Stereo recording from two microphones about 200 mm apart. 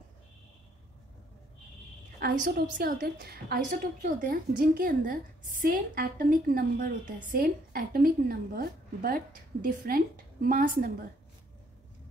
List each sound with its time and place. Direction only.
2.1 s a woman's voice: 50° right (ahead or behind)